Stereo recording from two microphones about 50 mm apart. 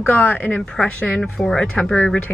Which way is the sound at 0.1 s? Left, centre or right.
Left.